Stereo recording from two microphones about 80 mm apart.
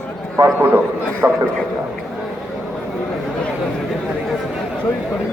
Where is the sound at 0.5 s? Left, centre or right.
Right.